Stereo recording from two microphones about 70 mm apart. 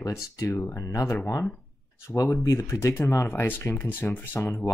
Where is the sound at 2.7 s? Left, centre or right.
Left.